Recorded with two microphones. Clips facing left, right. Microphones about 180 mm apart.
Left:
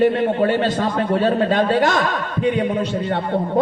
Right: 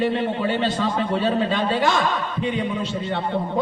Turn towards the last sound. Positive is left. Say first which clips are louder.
# left 4 dB
turn(degrees=45)  # may be behind; listen again after turning